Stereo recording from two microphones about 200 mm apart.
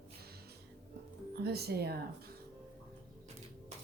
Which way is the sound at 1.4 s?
55° right (ahead or behind).